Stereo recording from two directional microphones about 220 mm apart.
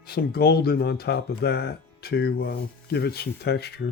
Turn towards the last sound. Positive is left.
turn(degrees=45)  # may be behind; listen again after turning